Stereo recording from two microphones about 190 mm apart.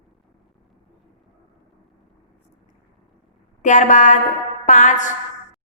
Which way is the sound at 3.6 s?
40° left (ahead or behind).